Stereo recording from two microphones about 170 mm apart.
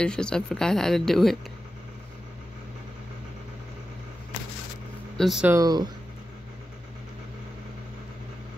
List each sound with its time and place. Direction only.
0.0 s speech: 5° left (ahead or behind)
5.1 s speech: centre (ahead or behind)
5.5 s speech: 20° right (ahead or behind)